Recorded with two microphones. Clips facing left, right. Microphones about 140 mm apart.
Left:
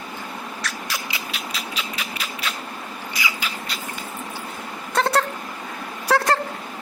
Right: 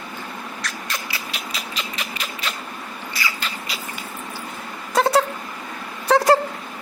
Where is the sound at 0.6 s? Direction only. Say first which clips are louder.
Even; centre (ahead or behind).